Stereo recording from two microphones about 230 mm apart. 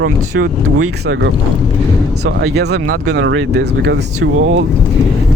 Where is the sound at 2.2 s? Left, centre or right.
Right.